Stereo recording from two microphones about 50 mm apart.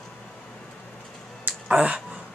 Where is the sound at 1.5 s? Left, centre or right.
Right.